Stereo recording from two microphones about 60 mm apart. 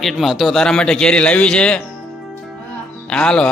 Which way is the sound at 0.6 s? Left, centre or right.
Centre.